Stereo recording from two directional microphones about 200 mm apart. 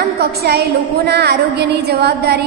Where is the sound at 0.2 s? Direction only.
55° right (ahead or behind).